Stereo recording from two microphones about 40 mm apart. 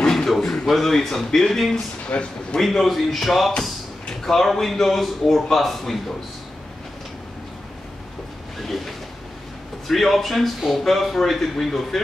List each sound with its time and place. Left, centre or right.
0.0 s a sound: centre
0.7 s a man's voice: centre
2.1 s speech: left
2.6 s a man's voice: centre
8.5 s a sound: centre
9.8 s a man's voice: centre